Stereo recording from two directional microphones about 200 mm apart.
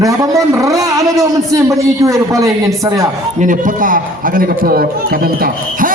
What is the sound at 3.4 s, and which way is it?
Speech, 40° right (ahead or behind).